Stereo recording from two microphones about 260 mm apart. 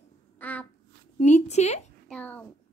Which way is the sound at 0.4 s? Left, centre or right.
Centre.